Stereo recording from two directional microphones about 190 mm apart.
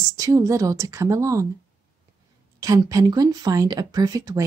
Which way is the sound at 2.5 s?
20° right (ahead or behind).